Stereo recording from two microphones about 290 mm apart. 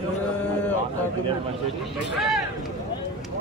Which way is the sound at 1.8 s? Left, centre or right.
Centre.